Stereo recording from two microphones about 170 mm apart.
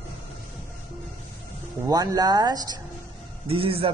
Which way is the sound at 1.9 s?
20° right (ahead or behind).